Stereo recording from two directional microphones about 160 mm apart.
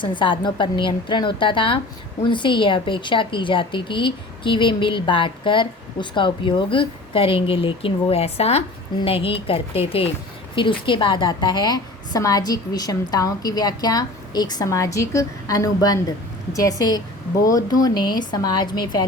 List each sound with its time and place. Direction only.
0.0 s a woman's voice: 30° left (ahead or behind)